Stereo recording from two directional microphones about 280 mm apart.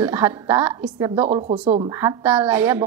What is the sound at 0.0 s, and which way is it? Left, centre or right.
A woman's voice, centre.